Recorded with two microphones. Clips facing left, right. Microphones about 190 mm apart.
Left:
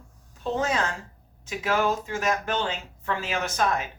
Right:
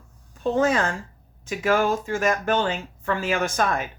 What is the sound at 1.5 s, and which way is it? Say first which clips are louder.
Speech: right 4 dB; 50° right (ahead or behind).